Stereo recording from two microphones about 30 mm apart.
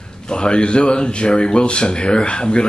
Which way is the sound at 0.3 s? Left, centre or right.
Left.